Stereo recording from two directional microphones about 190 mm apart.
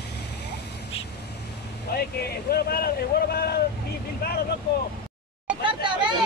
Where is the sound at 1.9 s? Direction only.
55° left (ahead or behind).